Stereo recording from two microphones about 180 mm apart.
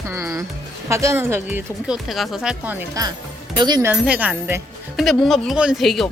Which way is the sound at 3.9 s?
5° right (ahead or behind).